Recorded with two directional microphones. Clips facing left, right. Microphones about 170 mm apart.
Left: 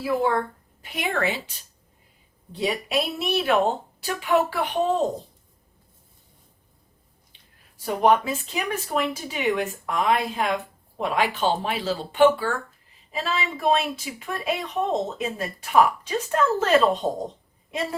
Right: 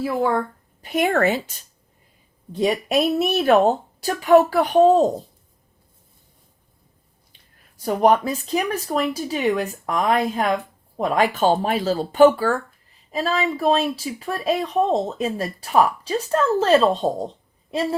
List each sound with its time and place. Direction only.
0.3 s speech: 40° right (ahead or behind)
7.8 s speech: 40° right (ahead or behind)